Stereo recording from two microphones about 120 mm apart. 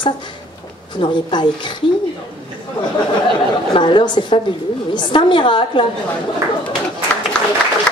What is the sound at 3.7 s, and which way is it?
Speech, 40° left (ahead or behind).